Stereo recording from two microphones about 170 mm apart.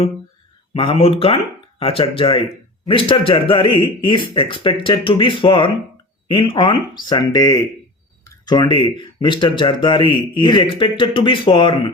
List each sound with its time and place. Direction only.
0.7 s a man's voice: 35° left (ahead or behind)